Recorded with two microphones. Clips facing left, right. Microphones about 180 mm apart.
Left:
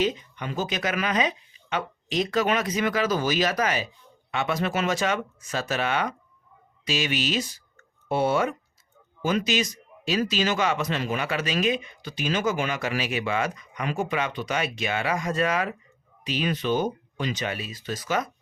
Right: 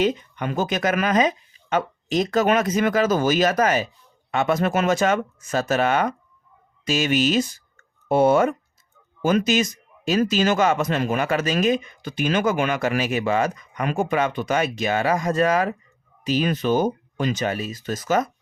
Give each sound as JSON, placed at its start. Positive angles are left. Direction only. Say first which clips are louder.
{"t": 0.0, "sound": "speech", "louder": "right 4 dB", "side_deg": -55}